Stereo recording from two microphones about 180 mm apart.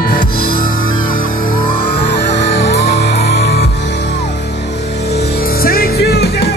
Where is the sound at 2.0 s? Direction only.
75° left (ahead or behind).